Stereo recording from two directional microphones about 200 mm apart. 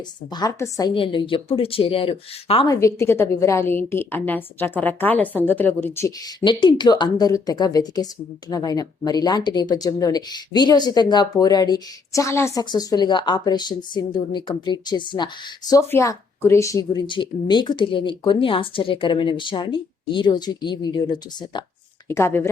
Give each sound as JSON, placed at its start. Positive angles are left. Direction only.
{"t": 0.3, "sound": "speech", "side_deg": 20}
{"t": 2.8, "sound": "a woman's voice", "side_deg": 15}